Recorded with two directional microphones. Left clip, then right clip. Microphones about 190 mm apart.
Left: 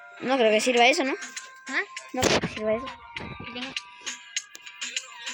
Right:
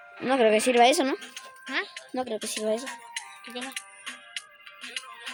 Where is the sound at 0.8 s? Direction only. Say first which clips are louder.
Right 1 dB; 15° right (ahead or behind).